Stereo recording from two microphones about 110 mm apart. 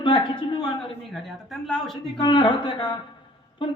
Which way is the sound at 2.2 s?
45° left (ahead or behind).